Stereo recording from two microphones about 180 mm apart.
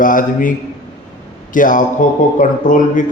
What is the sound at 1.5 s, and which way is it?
A man's voice, 50° left (ahead or behind).